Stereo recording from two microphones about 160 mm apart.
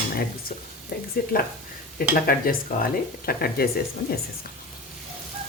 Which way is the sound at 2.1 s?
65° left (ahead or behind).